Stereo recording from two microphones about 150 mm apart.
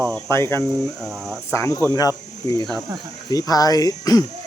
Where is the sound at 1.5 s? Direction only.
20° left (ahead or behind).